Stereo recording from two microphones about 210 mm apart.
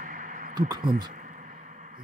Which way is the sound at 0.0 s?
40° right (ahead or behind).